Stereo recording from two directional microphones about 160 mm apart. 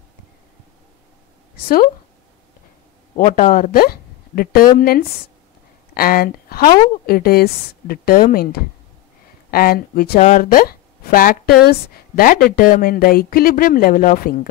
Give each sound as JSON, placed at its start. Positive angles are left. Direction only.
{"t": 3.3, "sound": "a woman's voice", "side_deg": 50}
{"t": 10.1, "sound": "speech", "side_deg": 45}
{"t": 10.4, "sound": "speech", "side_deg": 65}